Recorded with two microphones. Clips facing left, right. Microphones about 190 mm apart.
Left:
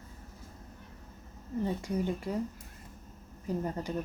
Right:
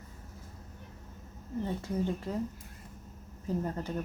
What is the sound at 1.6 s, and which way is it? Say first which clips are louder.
Speech: left 1 dB; 15° left (ahead or behind).